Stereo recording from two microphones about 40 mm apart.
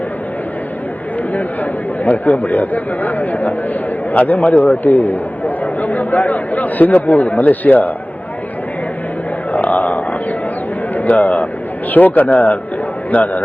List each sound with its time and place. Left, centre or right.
2.0 s speech: left
9.5 s a sound: left
10.9 s a man's voice: left